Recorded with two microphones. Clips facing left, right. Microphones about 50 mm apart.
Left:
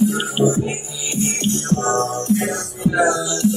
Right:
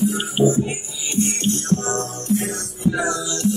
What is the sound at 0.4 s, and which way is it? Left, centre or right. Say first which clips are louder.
Music: right 1 dB; centre.